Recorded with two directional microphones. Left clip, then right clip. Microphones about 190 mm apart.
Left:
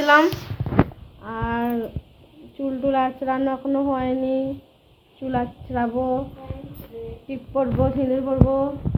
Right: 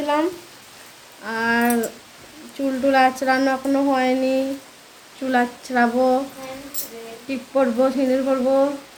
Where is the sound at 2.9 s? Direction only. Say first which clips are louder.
Right 6 dB; 10° right (ahead or behind).